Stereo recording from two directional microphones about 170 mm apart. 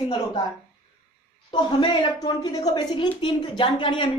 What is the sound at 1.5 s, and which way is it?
A woman's voice, 25° left (ahead or behind).